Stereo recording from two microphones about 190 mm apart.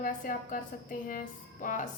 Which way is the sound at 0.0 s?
45° left (ahead or behind).